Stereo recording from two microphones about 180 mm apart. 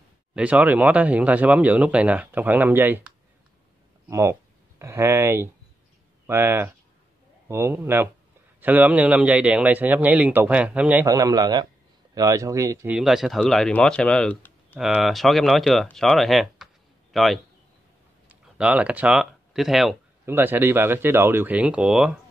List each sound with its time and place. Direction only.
0.3 s speech: 5° right (ahead or behind)
4.1 s speech: 15° right (ahead or behind)
12.9 s speech: centre (ahead or behind)
20.2 s speech: 10° right (ahead or behind)